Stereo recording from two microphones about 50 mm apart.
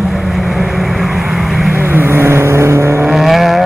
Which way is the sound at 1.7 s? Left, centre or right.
Right.